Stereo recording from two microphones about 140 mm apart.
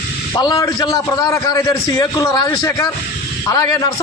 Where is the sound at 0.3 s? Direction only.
25° left (ahead or behind).